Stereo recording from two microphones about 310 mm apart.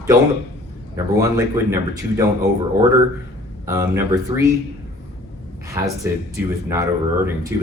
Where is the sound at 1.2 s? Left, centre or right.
Centre.